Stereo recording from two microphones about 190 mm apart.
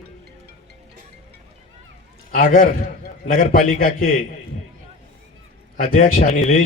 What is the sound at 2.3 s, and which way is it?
A man's voice, 45° left (ahead or behind).